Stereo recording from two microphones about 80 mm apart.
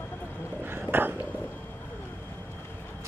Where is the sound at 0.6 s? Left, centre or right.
Right.